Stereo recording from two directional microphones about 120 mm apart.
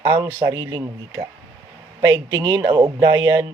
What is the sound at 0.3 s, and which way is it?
Speech, 25° right (ahead or behind).